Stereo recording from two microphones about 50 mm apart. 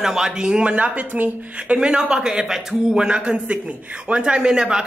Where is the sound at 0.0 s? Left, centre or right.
Centre; by 1.8 s right.